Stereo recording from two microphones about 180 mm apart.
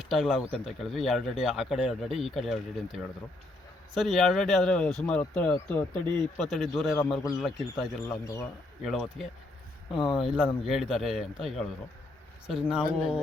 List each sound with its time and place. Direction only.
0.0 s speech: centre (ahead or behind)
8.2 s speech: 20° left (ahead or behind)
8.8 s speech: centre (ahead or behind)